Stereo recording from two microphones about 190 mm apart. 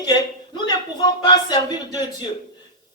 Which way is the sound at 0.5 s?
25° left (ahead or behind).